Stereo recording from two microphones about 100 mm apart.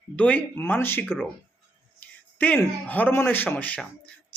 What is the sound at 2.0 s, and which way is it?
Speech, 15° left (ahead or behind).